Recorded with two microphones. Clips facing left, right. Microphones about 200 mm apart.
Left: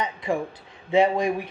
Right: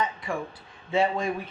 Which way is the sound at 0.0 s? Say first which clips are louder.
Left 4 dB; 20° left (ahead or behind).